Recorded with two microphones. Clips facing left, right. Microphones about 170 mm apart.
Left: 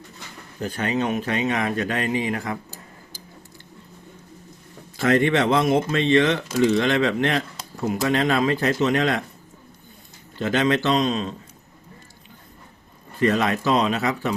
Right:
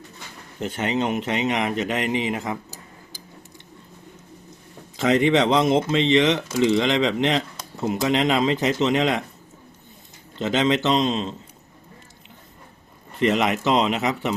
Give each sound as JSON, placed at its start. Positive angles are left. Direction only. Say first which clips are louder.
{"t": 0.6, "sound": "speech", "louder": "even", "side_deg": -25}
{"t": 4.9, "sound": "speech", "louder": "right 1 dB", "side_deg": -20}
{"t": 10.3, "sound": "speech", "louder": "even", "side_deg": -20}
{"t": 13.1, "sound": "speech", "louder": "even", "side_deg": -20}